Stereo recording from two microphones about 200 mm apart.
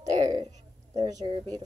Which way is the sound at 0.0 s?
20° right (ahead or behind).